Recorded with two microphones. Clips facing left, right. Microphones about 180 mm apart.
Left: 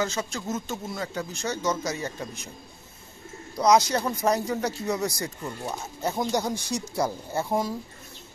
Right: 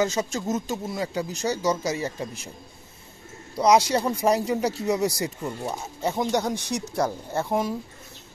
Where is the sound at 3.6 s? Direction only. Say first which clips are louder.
Right 1 dB; 5° right (ahead or behind).